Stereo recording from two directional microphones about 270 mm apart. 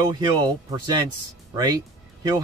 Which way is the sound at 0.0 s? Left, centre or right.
Centre.